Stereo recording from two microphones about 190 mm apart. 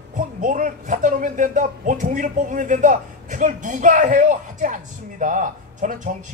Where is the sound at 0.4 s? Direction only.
45° right (ahead or behind).